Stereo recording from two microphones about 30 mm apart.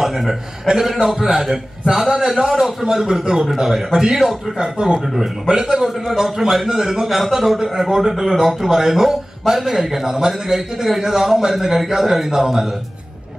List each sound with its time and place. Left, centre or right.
0.0 s a man's voice: centre
4.6 s a man's voice: right
6.0 s a man's voice: centre